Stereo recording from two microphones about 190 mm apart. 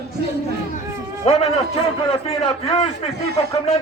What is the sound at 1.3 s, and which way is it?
A man's voice, 30° left (ahead or behind).